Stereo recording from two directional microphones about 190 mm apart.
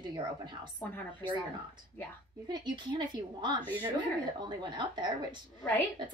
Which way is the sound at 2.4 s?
20° right (ahead or behind).